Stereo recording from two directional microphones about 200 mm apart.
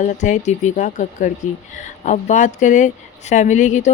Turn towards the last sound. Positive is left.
turn(degrees=35)  # may be behind; listen again after turning